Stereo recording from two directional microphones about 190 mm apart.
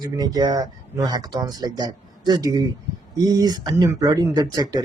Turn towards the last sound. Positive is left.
turn(degrees=-20)  # may be behind; listen again after turning